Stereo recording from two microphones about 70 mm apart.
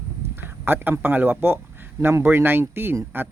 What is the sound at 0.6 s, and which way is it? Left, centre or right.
Speech, right.